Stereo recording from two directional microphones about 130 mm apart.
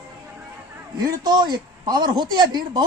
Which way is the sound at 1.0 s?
35° right (ahead or behind).